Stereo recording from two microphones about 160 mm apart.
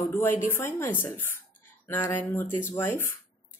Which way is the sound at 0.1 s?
10° left (ahead or behind).